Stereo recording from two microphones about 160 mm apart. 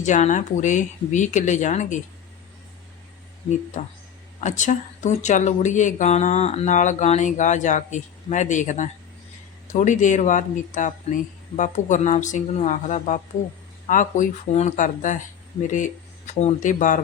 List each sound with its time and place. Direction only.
0.0 s speech: 50° left (ahead or behind)
4.4 s speech: 50° left (ahead or behind)